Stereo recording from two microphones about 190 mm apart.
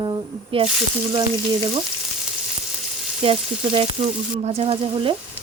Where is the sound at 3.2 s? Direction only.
30° right (ahead or behind).